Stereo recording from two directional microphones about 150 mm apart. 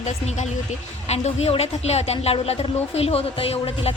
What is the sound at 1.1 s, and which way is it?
A woman's voice, 45° left (ahead or behind).